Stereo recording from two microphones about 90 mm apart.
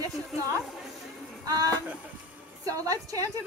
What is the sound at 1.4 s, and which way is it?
Female singing, 45° right (ahead or behind).